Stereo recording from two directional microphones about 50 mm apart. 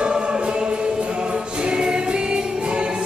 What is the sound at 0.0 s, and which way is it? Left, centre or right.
Music, centre.